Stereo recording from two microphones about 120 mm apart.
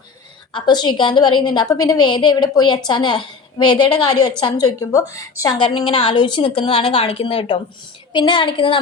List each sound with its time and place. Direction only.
0.5 s a woman's voice: 35° left (ahead or behind)
5.5 s a woman's voice: 45° left (ahead or behind)